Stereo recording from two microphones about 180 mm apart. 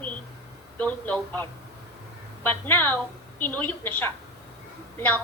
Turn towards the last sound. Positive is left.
turn(degrees=10)  # may be behind; listen again after turning